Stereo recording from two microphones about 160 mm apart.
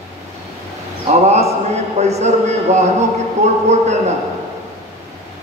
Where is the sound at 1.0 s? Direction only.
40° right (ahead or behind).